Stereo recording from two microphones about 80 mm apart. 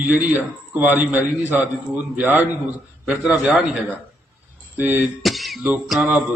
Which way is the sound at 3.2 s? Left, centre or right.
Centre.